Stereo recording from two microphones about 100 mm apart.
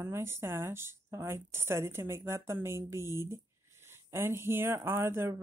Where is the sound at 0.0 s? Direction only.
25° right (ahead or behind).